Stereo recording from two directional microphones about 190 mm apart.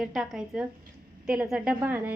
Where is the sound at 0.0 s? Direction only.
Centre (ahead or behind).